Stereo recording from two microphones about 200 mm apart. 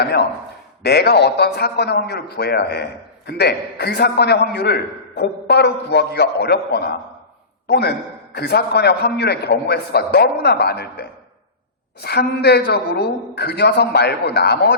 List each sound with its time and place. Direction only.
0.0 s a man's voice: 55° left (ahead or behind)